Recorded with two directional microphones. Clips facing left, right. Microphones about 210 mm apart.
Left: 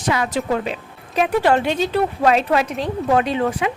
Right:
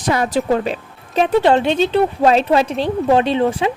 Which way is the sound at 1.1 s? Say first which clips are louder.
Right 3 dB; 25° right (ahead or behind).